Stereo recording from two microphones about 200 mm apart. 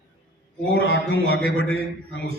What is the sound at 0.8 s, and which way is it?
Speech, 50° right (ahead or behind).